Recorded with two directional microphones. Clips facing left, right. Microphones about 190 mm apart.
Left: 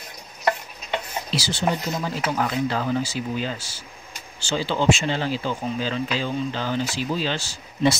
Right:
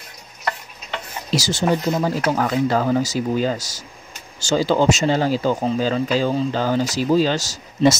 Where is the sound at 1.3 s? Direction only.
45° right (ahead or behind).